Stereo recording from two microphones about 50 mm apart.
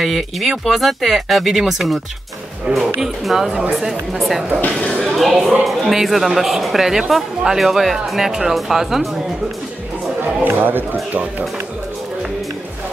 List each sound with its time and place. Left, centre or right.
0.0 s speech: centre
2.7 s speech: centre
3.0 s speech: centre
10.4 s speech: right